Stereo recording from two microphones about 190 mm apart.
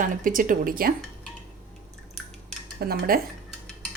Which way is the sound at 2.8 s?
50° right (ahead or behind).